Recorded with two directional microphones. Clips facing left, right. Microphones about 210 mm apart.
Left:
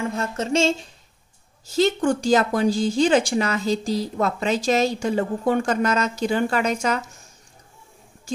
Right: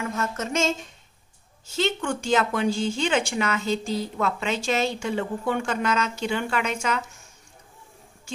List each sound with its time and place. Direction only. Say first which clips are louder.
0.0 s a woman's voice: left 3 dB; 30° left (ahead or behind)